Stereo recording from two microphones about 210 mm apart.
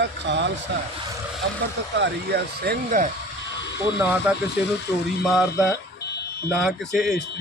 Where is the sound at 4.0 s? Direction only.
5° right (ahead or behind).